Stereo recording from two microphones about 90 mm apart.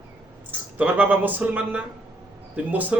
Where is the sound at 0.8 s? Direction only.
20° right (ahead or behind).